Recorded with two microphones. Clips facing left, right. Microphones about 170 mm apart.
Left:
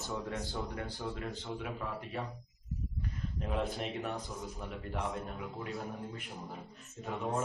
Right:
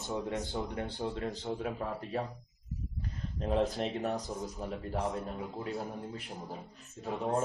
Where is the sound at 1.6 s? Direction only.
45° right (ahead or behind).